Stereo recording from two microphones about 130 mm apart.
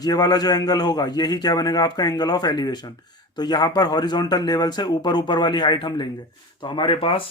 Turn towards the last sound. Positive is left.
turn(degrees=45)  # may be behind; listen again after turning